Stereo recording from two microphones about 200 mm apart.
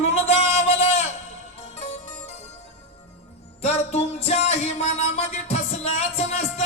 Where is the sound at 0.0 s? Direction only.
30° left (ahead or behind).